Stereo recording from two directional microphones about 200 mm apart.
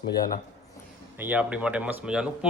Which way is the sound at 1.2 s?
5° right (ahead or behind).